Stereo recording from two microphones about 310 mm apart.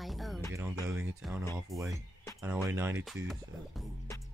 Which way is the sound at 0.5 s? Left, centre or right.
Centre.